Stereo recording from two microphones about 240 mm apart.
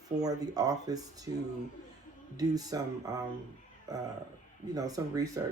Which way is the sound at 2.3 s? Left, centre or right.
Centre.